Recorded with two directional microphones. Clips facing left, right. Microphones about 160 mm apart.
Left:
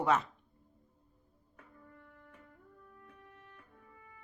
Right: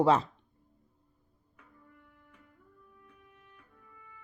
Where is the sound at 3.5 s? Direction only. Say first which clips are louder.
Left 1 dB; 40° left (ahead or behind).